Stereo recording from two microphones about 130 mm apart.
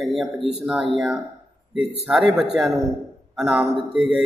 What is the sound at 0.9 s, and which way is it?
A man's voice, 5° right (ahead or behind).